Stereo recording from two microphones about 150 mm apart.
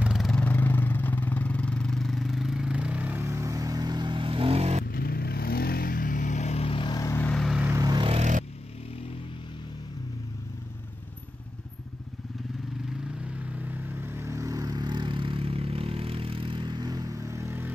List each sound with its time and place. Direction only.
0.0 s vehicle: centre (ahead or behind); by 4.8 s 45° right (ahead or behind)
4.8 s vehicle: 90° left; by 7.2 s 25° left (ahead or behind)
7.2 s vehicle: 5° left (ahead or behind)
7.6 s vehicle: 20° right (ahead or behind)
8.1 s vehicle: 50° right (ahead or behind)
13.2 s vehicle: 10° right (ahead or behind)